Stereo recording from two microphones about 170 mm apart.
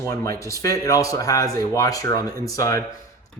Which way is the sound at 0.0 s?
15° left (ahead or behind).